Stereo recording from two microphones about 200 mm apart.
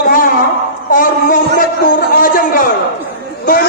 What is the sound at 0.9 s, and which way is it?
Music, 40° left (ahead or behind).